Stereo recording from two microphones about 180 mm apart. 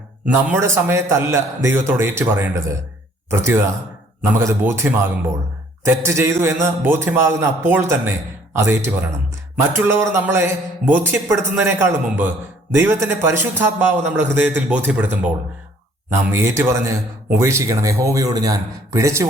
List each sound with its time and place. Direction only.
0.4 s a man's voice: 10° right (ahead or behind)
16.3 s a man's voice: 15° right (ahead or behind)